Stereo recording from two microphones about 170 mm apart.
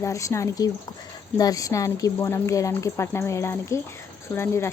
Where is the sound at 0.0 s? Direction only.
20° left (ahead or behind).